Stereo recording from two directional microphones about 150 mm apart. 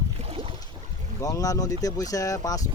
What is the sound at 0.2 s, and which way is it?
Boat, 40° right (ahead or behind).